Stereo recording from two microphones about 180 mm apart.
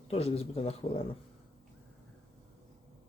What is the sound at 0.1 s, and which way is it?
Speech, 35° left (ahead or behind).